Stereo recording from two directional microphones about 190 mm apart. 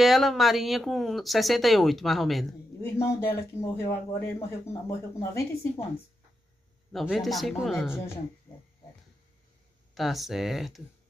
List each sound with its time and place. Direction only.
0.0 s speech: centre (ahead or behind)
2.8 s speech: 10° left (ahead or behind)
6.9 s speech: centre (ahead or behind)
9.9 s speech: centre (ahead or behind)